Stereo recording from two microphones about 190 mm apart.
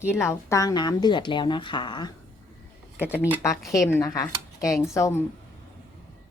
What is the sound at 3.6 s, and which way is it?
A woman's voice, 15° left (ahead or behind).